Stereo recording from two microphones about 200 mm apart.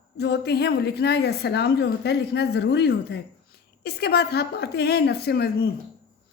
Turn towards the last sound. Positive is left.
turn(degrees=55)  # may be behind; listen again after turning